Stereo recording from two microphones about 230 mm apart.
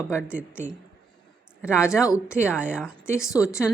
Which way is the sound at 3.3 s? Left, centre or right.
Centre.